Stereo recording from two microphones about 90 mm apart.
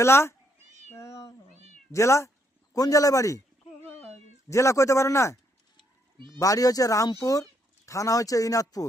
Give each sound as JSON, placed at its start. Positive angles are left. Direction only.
{"t": 0.0, "sound": "speech", "side_deg": 30}
{"t": 0.9, "sound": "cat", "side_deg": 30}
{"t": 1.9, "sound": "speech", "side_deg": 35}
{"t": 4.4, "sound": "speech", "side_deg": 35}
{"t": 6.4, "sound": "speech", "side_deg": 40}